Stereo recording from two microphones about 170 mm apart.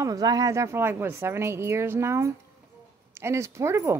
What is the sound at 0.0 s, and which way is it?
Speech, 20° right (ahead or behind).